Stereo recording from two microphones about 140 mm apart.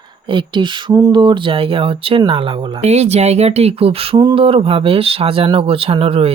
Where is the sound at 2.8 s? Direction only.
50° right (ahead or behind).